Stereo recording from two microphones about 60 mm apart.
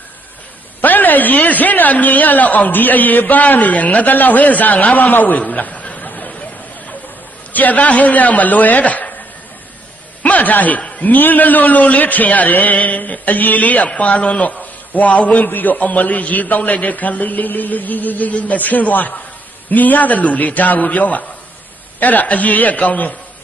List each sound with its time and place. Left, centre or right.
0.7 s a man's voice: left
7.5 s a man's voice: left
10.2 s a man's voice: left